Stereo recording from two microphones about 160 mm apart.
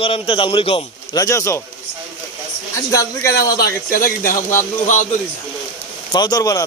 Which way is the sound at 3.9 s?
65° left (ahead or behind).